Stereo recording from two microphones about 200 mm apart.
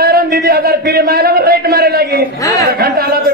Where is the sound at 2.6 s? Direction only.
50° right (ahead or behind).